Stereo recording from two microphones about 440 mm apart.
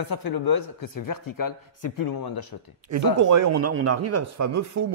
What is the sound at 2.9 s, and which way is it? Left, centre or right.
Speech, right.